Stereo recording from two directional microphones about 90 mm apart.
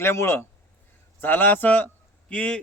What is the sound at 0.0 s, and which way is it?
A man's voice, 30° left (ahead or behind).